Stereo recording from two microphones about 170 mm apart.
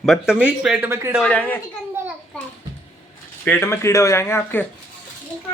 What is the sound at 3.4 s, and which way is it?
Speech, 15° left (ahead or behind).